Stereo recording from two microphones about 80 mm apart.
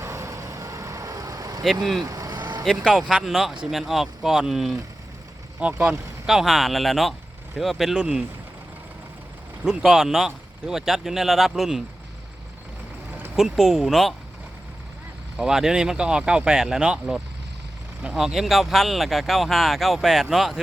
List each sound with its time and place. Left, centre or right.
0.0 s vehicle: right
1.6 s speech: centre
2.0 s vehicle: right
2.3 s vehicle: right
3.1 s speech: centre
5.9 s speech: centre
9.6 s speech: centre
13.3 s speech: centre
15.4 s speech: centre